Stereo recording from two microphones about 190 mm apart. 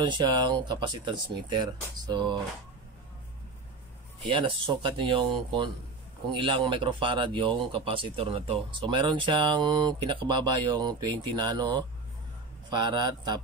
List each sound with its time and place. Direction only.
0.0 s speech: 25° right (ahead or behind)
4.3 s speech: 25° right (ahead or behind)